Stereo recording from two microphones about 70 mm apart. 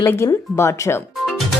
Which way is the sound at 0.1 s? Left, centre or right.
Left.